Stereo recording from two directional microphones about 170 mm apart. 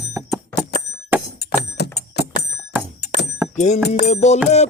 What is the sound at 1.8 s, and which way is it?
Bicycle bell, 80° left.